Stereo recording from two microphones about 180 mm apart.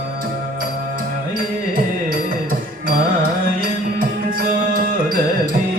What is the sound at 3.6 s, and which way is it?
Music, 50° right (ahead or behind).